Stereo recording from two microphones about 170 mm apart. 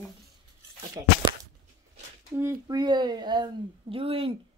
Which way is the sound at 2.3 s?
15° right (ahead or behind).